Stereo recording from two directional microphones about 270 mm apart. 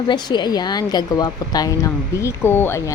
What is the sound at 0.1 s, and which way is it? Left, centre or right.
A woman's voice, centre.